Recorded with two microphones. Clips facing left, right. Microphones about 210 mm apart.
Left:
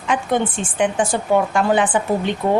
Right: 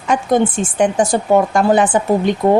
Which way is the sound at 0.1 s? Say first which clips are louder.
Right 5 dB; 40° right (ahead or behind).